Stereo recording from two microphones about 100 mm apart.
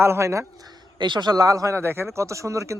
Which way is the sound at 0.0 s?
25° right (ahead or behind).